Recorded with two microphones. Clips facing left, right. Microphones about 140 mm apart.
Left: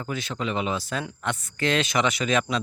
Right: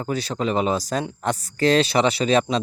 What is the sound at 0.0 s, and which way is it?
Speech, 35° right (ahead or behind).